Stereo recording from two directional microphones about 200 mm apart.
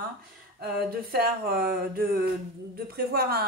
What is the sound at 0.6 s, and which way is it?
Speech, 50° right (ahead or behind).